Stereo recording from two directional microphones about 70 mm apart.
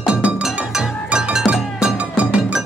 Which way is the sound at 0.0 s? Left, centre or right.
Centre.